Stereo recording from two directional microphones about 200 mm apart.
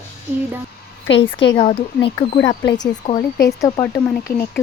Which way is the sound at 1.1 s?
70° left (ahead or behind).